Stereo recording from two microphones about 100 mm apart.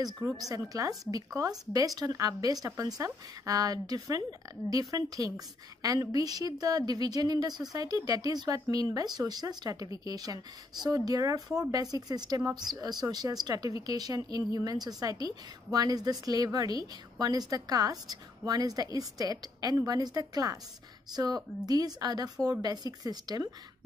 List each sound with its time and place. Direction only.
0.2 s a woman's voice: 35° right (ahead or behind)